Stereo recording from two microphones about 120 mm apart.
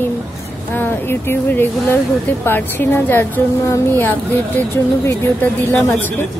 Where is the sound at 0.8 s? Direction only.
20° left (ahead or behind).